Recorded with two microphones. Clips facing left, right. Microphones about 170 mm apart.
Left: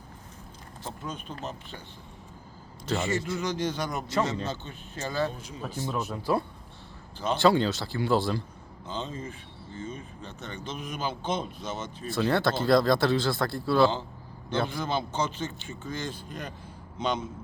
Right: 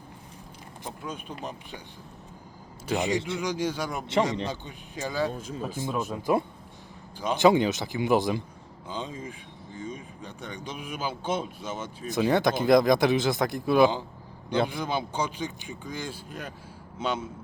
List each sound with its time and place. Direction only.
0.9 s speech: 10° right (ahead or behind)
2.8 s speech: 15° right (ahead or behind)
5.3 s speech: 45° right (ahead or behind)
5.8 s speech: 15° right (ahead or behind)